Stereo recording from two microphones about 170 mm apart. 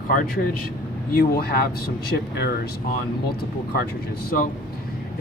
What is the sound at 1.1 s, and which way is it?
Speech, 60° left (ahead or behind).